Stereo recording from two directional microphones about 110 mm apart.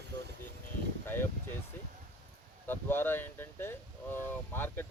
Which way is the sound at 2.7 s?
20° left (ahead or behind).